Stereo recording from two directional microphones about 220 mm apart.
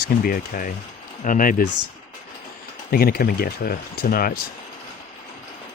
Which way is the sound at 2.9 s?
40° left (ahead or behind).